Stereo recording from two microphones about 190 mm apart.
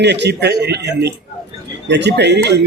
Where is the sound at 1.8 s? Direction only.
65° right (ahead or behind).